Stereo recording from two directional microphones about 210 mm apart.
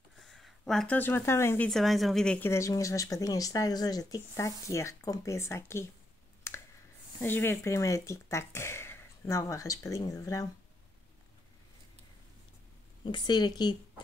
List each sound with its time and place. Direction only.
0.2 s speech: centre (ahead or behind)
1.7 s speech: centre (ahead or behind)
6.5 s clicking: 10° left (ahead or behind)
7.2 s speech: 10° left (ahead or behind)
13.0 s speech: 20° left (ahead or behind)